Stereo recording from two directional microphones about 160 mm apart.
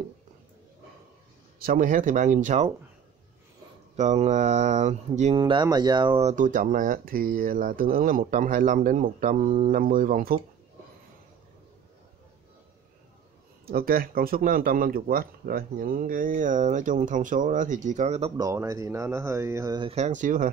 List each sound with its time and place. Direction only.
1.6 s speech: 60° right (ahead or behind)
3.9 s speech: 45° right (ahead or behind)
5.3 s speech: 30° right (ahead or behind)
6.2 s speech: 55° right (ahead or behind)
13.7 s speech: 70° right (ahead or behind); by 18.3 s 45° right (ahead or behind)
18.4 s speech: 20° right (ahead or behind)
19.8 s speech: 40° right (ahead or behind)